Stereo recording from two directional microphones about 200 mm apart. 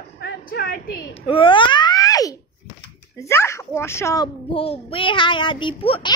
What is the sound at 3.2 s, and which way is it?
Speech, 15° left (ahead or behind).